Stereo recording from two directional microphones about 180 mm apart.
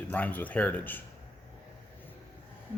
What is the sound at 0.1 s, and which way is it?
Speech, 10° left (ahead or behind).